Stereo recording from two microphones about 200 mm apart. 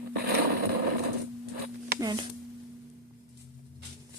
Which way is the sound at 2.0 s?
20° right (ahead or behind).